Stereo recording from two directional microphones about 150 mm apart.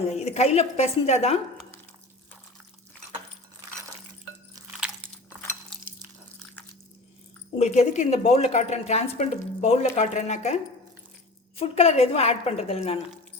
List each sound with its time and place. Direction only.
0.1 s a woman's voice: 45° left (ahead or behind)
4.7 s biting: 5° right (ahead or behind)
7.6 s a woman's voice: 50° left (ahead or behind)